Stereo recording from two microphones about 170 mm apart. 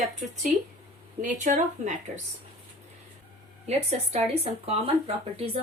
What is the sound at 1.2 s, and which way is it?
Speech, 45° right (ahead or behind).